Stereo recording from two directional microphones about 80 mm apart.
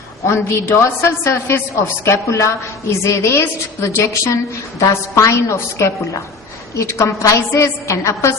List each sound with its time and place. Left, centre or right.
0.3 s a woman's voice: left